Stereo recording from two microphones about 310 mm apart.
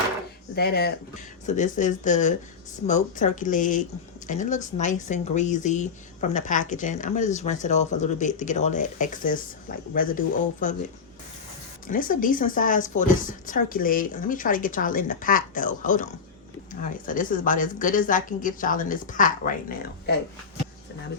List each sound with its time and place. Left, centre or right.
0.5 s speech: left
11.9 s speech: left
17.1 s speech: left